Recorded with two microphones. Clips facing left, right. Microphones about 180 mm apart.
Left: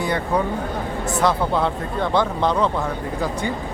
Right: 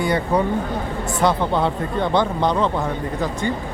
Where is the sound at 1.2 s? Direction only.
Centre (ahead or behind).